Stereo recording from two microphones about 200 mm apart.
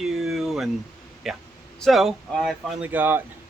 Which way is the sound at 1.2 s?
Centre (ahead or behind).